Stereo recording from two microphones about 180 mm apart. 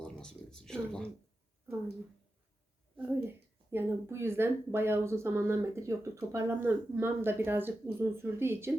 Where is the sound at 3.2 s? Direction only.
15° right (ahead or behind).